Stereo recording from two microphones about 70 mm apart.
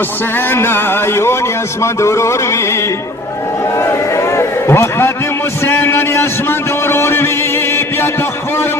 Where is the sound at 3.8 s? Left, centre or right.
Left.